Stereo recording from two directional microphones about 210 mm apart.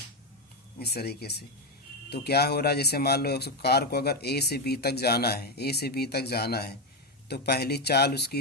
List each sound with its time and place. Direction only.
0.8 s speech: 50° left (ahead or behind)